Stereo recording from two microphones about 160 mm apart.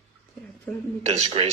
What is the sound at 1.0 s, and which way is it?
Speech, 40° right (ahead or behind).